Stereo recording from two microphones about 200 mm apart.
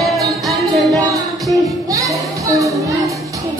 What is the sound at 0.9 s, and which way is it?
Music, 15° right (ahead or behind).